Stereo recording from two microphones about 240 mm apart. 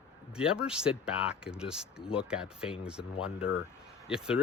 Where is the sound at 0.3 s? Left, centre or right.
Centre.